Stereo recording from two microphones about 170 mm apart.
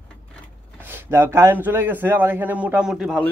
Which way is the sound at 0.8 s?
15° right (ahead or behind).